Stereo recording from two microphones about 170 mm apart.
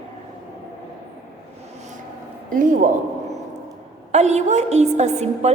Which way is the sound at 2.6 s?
50° right (ahead or behind).